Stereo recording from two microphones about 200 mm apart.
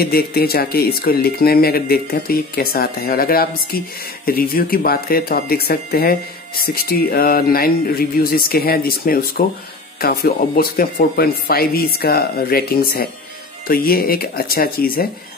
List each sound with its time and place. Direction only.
0.0 s speech: 50° left (ahead or behind)